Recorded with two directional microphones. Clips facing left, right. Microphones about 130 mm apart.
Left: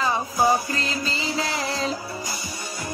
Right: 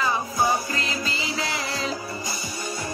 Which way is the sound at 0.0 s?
35° left (ahead or behind).